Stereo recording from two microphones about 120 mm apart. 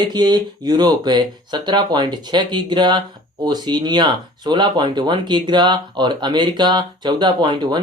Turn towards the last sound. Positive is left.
turn(degrees=-40)  # may be behind; listen again after turning